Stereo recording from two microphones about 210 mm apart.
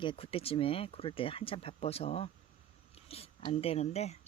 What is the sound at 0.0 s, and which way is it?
Speech, 25° left (ahead or behind).